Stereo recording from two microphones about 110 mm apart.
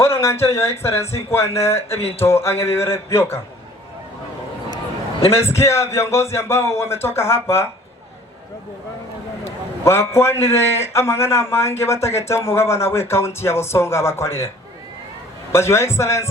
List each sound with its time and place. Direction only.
0.0 s speech: 25° left (ahead or behind)
5.3 s speech: 25° left (ahead or behind)
9.8 s speech: 25° left (ahead or behind)
15.5 s speech: 25° left (ahead or behind)